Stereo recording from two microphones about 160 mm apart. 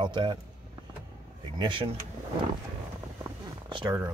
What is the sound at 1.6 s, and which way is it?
Speech, 30° right (ahead or behind).